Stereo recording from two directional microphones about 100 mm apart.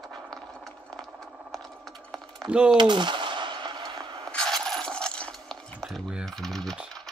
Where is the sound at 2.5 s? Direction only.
10° right (ahead or behind).